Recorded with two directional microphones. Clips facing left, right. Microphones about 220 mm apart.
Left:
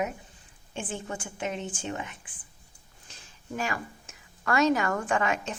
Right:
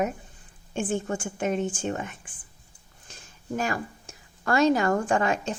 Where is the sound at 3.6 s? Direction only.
40° right (ahead or behind).